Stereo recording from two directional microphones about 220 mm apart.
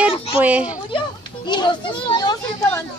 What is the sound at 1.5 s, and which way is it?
A child's voice, 20° left (ahead or behind).